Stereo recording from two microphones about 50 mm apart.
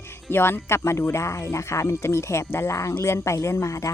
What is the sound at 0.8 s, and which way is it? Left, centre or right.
Speech, left.